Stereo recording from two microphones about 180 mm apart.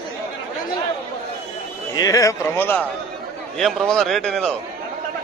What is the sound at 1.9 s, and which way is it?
A man's voice, 20° left (ahead or behind).